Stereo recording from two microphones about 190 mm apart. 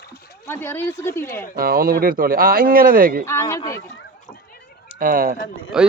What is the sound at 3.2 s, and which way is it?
Speech, 15° left (ahead or behind).